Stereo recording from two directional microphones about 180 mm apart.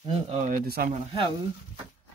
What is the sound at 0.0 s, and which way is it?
Speech, 30° right (ahead or behind).